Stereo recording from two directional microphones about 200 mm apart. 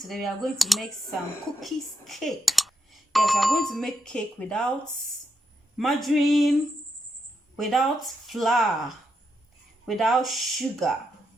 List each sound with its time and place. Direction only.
0.1 s speech: centre (ahead or behind)
5.7 s speech: centre (ahead or behind)
7.5 s speech: centre (ahead or behind)
9.8 s speech: centre (ahead or behind)